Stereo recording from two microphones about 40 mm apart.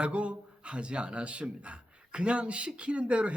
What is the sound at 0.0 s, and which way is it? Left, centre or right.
Speech, right.